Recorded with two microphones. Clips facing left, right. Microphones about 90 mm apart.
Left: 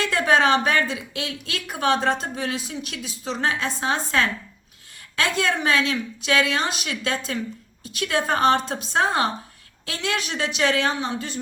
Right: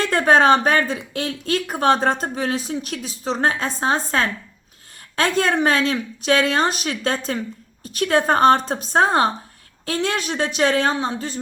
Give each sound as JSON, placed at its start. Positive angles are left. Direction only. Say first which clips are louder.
{"t": 0.0, "sound": "speech", "louder": "right 4 dB", "side_deg": -40}